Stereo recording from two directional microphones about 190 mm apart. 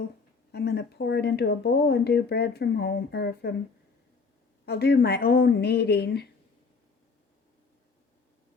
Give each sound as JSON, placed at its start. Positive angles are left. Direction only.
{"t": 0.5, "sound": "speech", "side_deg": 60}
{"t": 4.6, "sound": "speech", "side_deg": 60}